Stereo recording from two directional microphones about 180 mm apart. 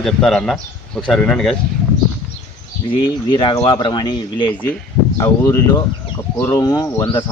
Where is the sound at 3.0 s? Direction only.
25° left (ahead or behind).